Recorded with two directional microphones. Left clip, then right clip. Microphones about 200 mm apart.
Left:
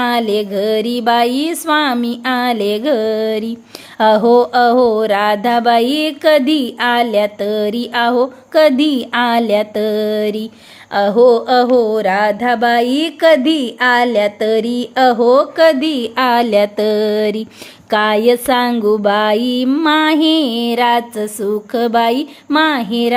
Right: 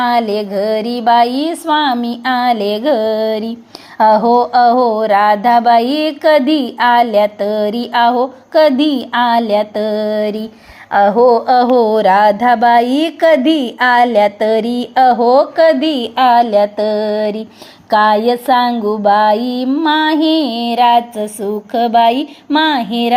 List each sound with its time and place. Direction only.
0.1 s speech: 15° left (ahead or behind)
11.5 s speech: centre (ahead or behind); by 16.5 s 20° left (ahead or behind)
16.7 s mantra: 20° left (ahead or behind)
17.9 s speech: 15° left (ahead or behind)